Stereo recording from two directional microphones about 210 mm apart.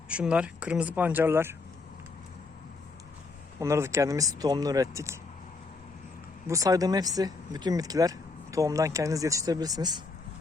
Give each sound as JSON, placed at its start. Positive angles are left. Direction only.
{"t": 0.1, "sound": "speech", "side_deg": -5}
{"t": 3.6, "sound": "speech", "side_deg": -15}
{"t": 6.5, "sound": "speech", "side_deg": -15}